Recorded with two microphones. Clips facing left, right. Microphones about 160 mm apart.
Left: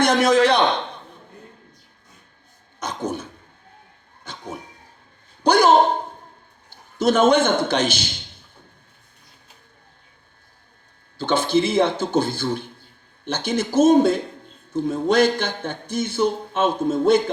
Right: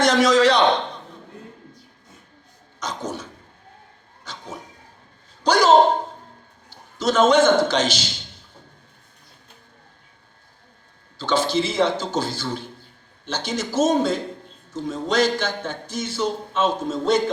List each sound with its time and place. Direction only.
0.0 s a man's voice: 55° left (ahead or behind)
2.8 s a sound: 55° left (ahead or behind)
6.7 s a man's voice: 55° left (ahead or behind)
11.2 s a man's voice: 55° left (ahead or behind)